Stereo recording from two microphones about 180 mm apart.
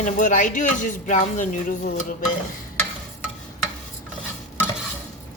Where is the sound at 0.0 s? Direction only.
45° left (ahead or behind).